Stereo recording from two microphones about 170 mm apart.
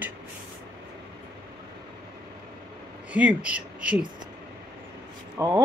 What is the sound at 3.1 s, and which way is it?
Speech, 10° right (ahead or behind).